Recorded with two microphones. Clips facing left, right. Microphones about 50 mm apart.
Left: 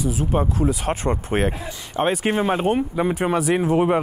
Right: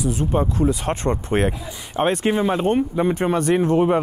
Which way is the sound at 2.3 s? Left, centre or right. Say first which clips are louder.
Right 1 dB; left.